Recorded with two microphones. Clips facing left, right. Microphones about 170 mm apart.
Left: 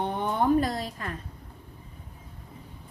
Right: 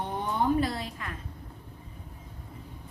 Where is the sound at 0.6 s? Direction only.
40° left (ahead or behind).